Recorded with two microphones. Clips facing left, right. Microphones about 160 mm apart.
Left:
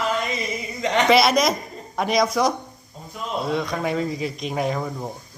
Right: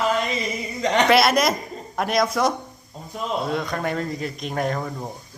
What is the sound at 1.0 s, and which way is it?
Speech, centre (ahead or behind).